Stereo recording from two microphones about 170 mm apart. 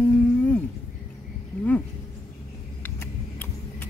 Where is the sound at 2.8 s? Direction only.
10° left (ahead or behind).